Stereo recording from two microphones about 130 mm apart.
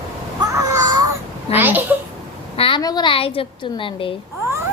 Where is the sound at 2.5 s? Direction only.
45° left (ahead or behind).